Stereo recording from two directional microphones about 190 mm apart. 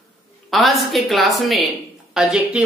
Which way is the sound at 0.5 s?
Centre (ahead or behind).